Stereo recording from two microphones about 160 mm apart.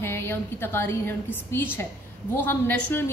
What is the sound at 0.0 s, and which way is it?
A woman's voice, 15° left (ahead or behind).